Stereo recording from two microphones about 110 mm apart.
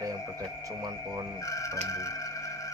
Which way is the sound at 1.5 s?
30° left (ahead or behind).